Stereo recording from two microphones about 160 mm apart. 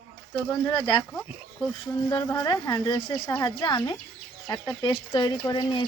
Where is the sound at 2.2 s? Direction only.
20° left (ahead or behind).